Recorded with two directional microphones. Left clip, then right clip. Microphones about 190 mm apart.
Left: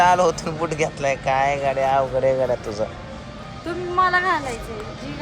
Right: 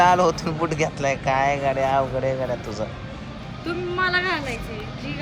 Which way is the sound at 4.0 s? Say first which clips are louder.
Left 4 dB; 60° left (ahead or behind).